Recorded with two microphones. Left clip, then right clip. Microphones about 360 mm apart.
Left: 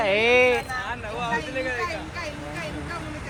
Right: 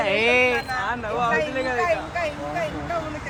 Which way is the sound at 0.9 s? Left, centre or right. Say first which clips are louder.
Right 5 dB; right.